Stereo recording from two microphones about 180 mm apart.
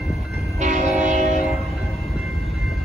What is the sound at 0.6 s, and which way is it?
Train, 40° right (ahead or behind).